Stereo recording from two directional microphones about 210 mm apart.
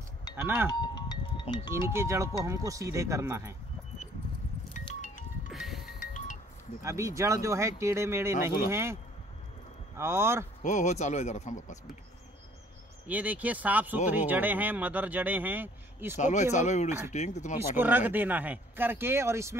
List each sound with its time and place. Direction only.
0.7 s music: 20° left (ahead or behind)
1.9 s speech: 10° right (ahead or behind)
4.7 s music: 35° left (ahead or behind)
5.5 s music: centre (ahead or behind)
5.9 s music: 40° left (ahead or behind)
6.8 s speech: 15° right (ahead or behind)
9.9 s speech: 10° right (ahead or behind)
10.6 s speech: 35° left (ahead or behind)
13.0 s speech: 5° right (ahead or behind)
16.2 s speech: 35° left (ahead or behind)
17.7 s speech: 10° right (ahead or behind)